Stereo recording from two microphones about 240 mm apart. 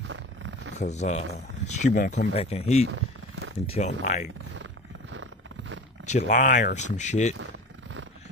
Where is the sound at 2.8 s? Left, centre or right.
Right.